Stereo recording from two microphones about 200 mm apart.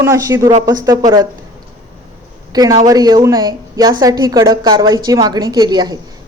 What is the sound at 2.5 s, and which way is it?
A woman's voice, 20° right (ahead or behind).